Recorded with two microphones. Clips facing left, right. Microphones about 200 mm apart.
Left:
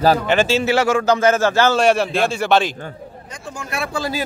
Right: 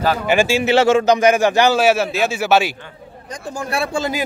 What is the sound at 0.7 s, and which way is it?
A man's voice, 25° right (ahead or behind).